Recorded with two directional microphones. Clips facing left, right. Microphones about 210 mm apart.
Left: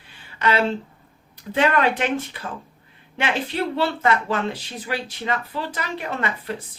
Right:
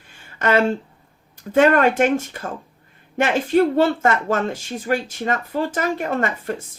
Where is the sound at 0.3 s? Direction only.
45° right (ahead or behind).